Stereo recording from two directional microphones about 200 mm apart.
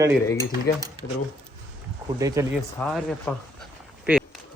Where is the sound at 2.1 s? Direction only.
15° right (ahead or behind).